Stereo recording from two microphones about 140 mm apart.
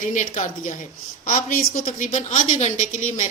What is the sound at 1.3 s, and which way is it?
A woman's voice, 80° left.